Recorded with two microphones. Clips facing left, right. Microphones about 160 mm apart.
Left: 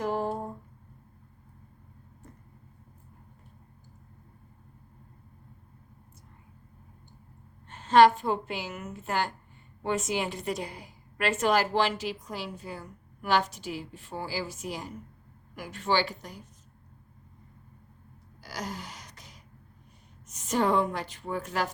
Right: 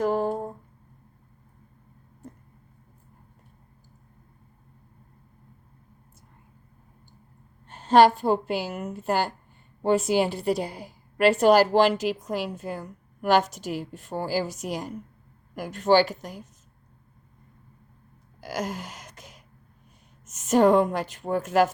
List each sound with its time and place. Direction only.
0.0 s a sound: 40° right (ahead or behind)
7.7 s a woman's voice: 40° right (ahead or behind)
18.3 s gasp: 50° right (ahead or behind)
20.4 s a woman's voice: 45° right (ahead or behind)